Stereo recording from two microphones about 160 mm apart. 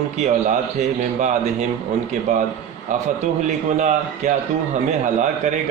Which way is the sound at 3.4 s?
50° right (ahead or behind).